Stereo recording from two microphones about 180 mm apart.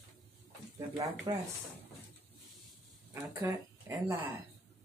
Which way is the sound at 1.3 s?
30° right (ahead or behind).